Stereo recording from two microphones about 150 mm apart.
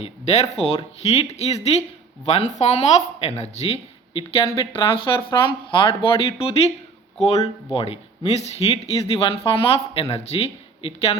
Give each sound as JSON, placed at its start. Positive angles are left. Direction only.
{"t": 0.0, "sound": "speech", "side_deg": 45}
{"t": 4.1, "sound": "speech", "side_deg": 30}